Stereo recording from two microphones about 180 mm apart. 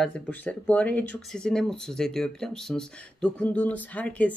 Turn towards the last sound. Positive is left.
turn(degrees=10)  # may be behind; listen again after turning